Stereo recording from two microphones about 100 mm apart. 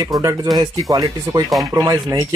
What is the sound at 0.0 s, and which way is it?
Speech, 40° right (ahead or behind).